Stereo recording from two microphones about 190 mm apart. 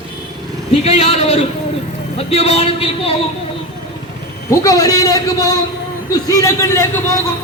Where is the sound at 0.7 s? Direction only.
30° left (ahead or behind).